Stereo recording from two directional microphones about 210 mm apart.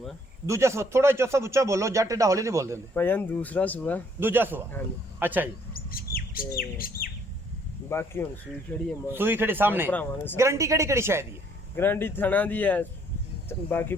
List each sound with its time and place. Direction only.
0.4 s speech: 15° right (ahead or behind)
2.9 s speech: 10° left (ahead or behind)
4.2 s speech: 10° right (ahead or behind)
5.7 s bird: 45° left (ahead or behind)
6.6 s speech: 45° left (ahead or behind)
7.9 s speech: 10° left (ahead or behind)
9.1 s speech: 10° right (ahead or behind)
9.9 s speech: 10° left (ahead or behind)
10.3 s speech: 15° right (ahead or behind)
11.8 s speech: 10° left (ahead or behind)